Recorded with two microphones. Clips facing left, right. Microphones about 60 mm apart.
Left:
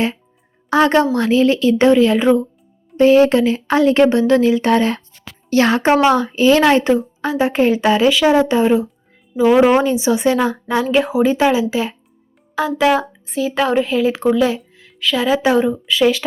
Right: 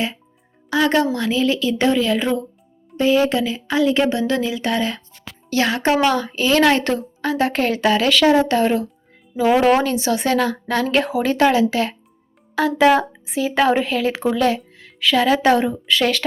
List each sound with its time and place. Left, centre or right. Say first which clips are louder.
0.7 s speech: left 4 dB; left
3.0 s speech: left 6 dB; left; by 10.8 s centre
10.9 s speech: left 5 dB; centre